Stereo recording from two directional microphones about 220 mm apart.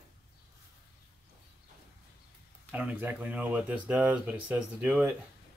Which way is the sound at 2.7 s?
5° right (ahead or behind).